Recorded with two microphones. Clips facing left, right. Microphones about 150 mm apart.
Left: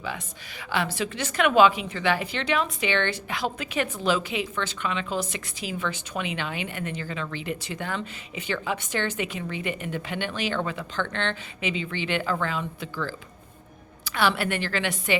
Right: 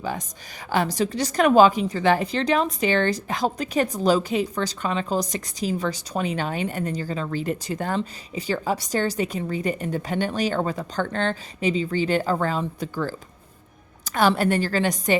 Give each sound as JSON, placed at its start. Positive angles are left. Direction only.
{"t": 0.0, "sound": "a woman's voice", "side_deg": -40}